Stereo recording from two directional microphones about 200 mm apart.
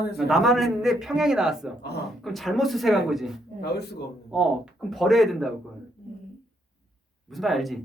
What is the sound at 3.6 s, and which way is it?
Speech, 55° left (ahead or behind).